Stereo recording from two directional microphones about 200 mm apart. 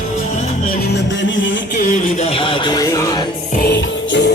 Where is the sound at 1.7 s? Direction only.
40° left (ahead or behind); by 3.3 s 20° left (ahead or behind).